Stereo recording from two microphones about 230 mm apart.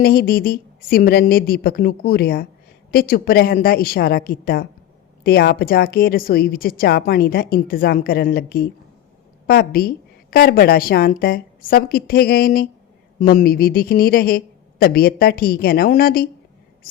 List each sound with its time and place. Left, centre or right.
0.0 s a woman's voice: left